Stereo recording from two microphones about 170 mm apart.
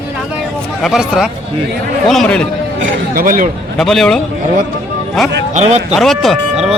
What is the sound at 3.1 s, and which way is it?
Speech, 55° right (ahead or behind).